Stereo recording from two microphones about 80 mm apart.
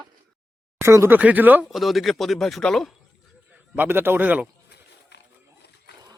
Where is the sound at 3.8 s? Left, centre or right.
Right.